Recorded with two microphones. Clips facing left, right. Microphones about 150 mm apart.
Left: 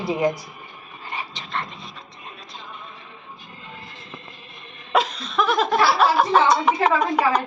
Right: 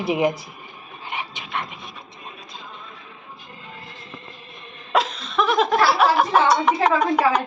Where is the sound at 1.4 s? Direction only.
15° right (ahead or behind).